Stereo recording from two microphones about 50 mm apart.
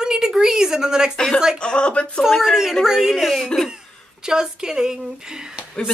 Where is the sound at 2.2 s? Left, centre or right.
Centre.